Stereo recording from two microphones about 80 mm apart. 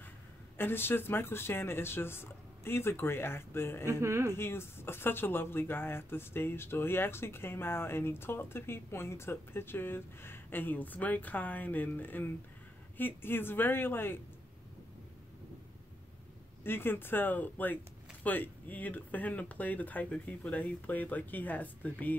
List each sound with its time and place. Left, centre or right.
0.6 s speech: left
4.0 s speech: right
4.4 s speech: left
16.6 s speech: left